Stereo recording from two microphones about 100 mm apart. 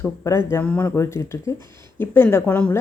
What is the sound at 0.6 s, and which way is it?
Speech, 15° left (ahead or behind).